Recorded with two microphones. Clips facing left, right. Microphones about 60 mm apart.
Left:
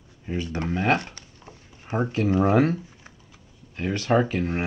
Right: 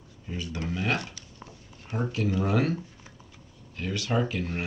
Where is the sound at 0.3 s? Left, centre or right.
Left.